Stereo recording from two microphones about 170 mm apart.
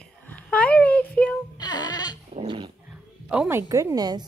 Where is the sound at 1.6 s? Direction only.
25° left (ahead or behind).